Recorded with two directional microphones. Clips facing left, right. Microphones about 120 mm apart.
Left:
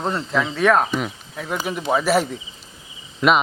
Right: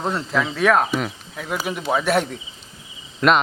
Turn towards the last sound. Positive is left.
turn(degrees=0)  # may be behind; listen again after turning